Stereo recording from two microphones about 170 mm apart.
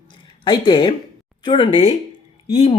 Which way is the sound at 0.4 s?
25° left (ahead or behind).